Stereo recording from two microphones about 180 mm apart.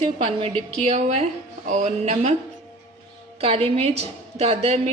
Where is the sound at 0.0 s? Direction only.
30° right (ahead or behind).